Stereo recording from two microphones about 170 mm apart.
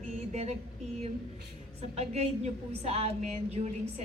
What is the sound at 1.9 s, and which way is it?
A man's voice, 40° right (ahead or behind).